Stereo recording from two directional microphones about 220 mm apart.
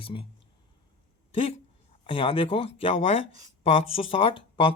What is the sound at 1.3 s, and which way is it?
Speech, 25° left (ahead or behind).